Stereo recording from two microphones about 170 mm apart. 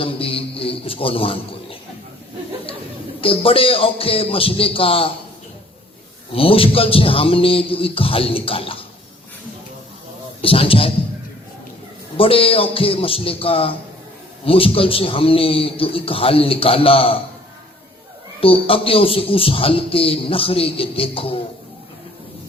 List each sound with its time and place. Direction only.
0.0 s a sound: 35° left (ahead or behind)
3.2 s speech: 35° left (ahead or behind)
6.3 s speech: 35° left (ahead or behind)
10.4 s speech: 35° left (ahead or behind)
12.1 s speech: 35° left (ahead or behind)
18.3 s speech: 35° left (ahead or behind)